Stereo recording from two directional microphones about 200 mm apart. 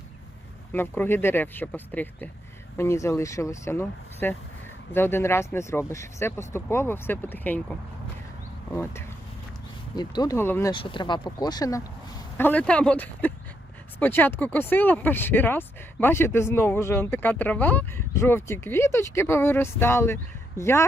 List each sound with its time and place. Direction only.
0.7 s speech: 10° left (ahead or behind)
10.7 s speech: 25° left (ahead or behind)
12.4 s speech: 10° left (ahead or behind)